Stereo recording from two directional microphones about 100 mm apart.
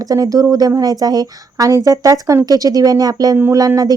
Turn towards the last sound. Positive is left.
turn(degrees=-40)  # may be behind; listen again after turning